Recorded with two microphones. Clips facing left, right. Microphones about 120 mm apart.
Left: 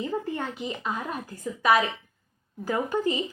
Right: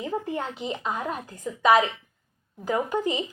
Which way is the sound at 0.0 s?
15° right (ahead or behind).